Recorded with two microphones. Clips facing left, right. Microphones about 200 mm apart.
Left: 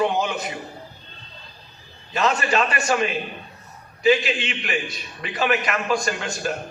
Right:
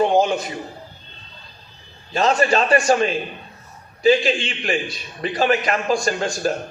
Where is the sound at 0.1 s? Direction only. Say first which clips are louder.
Right 7 dB; 35° right (ahead or behind).